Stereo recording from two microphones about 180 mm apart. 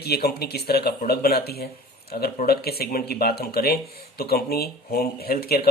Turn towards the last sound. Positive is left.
turn(degrees=60)  # may be behind; listen again after turning